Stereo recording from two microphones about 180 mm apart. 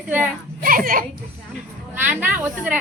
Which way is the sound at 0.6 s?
50° right (ahead or behind).